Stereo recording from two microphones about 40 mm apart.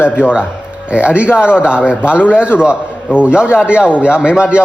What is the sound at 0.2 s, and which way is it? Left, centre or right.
A man's voice, right.